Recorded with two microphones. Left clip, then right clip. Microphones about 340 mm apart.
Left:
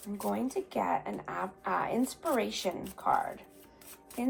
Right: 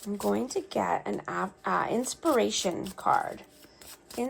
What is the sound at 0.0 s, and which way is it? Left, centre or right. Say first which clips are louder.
A woman's voice: right 5 dB; right.